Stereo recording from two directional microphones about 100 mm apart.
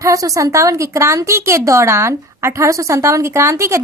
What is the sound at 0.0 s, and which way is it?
A woman's voice, 35° right (ahead or behind).